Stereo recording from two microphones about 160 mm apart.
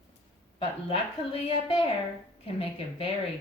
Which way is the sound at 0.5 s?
35° left (ahead or behind).